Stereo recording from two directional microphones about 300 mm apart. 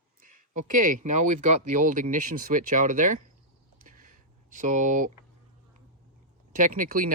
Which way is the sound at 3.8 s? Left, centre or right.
Right.